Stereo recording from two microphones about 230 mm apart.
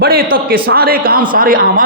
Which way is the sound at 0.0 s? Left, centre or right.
Right.